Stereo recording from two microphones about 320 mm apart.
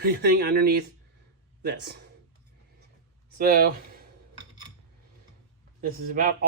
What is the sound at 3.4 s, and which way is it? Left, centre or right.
Speech, right.